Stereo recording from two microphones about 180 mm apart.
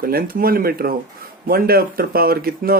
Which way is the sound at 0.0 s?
55° right (ahead or behind).